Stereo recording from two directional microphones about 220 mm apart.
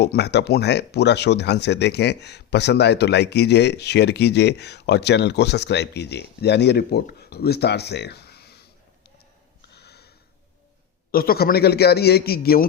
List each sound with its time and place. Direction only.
0.0 s speech: 50° left (ahead or behind)
9.6 s a sound: 50° left (ahead or behind)
11.1 s speech: 45° left (ahead or behind)